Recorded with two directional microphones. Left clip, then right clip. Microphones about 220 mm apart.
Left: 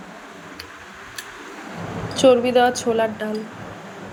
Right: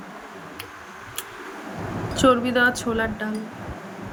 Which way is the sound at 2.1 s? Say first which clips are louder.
Left 4 dB; 10° right (ahead or behind).